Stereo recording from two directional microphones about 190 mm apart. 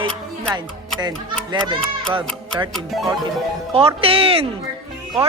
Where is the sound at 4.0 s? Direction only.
30° right (ahead or behind).